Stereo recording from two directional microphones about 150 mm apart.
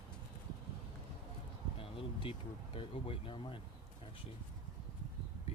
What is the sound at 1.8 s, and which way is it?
Speech, 40° left (ahead or behind).